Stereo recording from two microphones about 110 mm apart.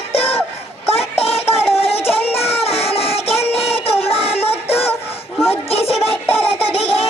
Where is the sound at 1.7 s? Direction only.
65° left (ahead or behind).